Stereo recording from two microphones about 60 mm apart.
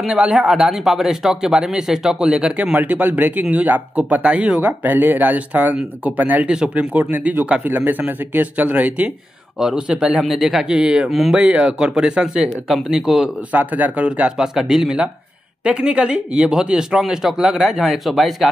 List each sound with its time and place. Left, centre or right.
0.0 s a man's voice: centre
6.5 s speech: centre
7.6 s a man's voice: right
9.6 s a man's voice: centre
10.2 s a man's voice: centre
11.1 s speech: centre
11.3 s a man's voice: centre
13.5 s speech: right
14.3 s a man's voice: centre